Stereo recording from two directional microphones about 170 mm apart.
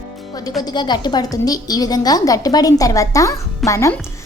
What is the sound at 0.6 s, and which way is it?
A woman's voice, 25° left (ahead or behind).